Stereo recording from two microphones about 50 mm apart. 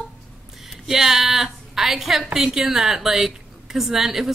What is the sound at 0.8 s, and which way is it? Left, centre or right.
A woman's voice, centre.